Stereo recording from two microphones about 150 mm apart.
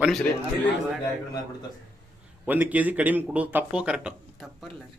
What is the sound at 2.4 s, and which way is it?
A man's voice, 10° right (ahead or behind).